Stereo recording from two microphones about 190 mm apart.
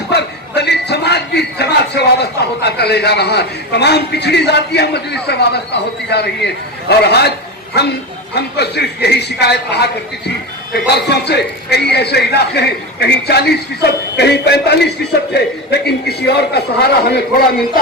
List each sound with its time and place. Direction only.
0.1 s a sound: 60° left (ahead or behind)
2.6 s a man's voice: 60° left (ahead or behind)
8.4 s a man's voice: 60° left (ahead or behind)